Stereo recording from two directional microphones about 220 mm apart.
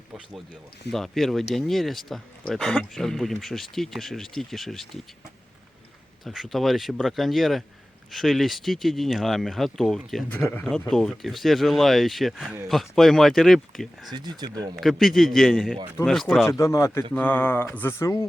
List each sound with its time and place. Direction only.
0.9 s speech: centre (ahead or behind)
6.2 s speech: centre (ahead or behind)
14.1 s speech: 20° right (ahead or behind)
14.8 s speech: centre (ahead or behind)
16.5 s speech: 15° left (ahead or behind)